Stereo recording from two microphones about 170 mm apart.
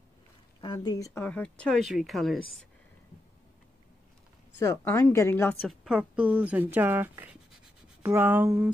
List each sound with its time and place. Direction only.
0.6 s speech: 25° left (ahead or behind)
1.2 s a woman's voice: 5° left (ahead or behind)
4.6 s a woman's voice: 15° left (ahead or behind)
5.7 s speech: 5° right (ahead or behind)